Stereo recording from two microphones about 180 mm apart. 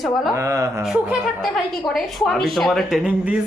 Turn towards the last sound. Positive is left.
turn(degrees=-5)  # may be behind; listen again after turning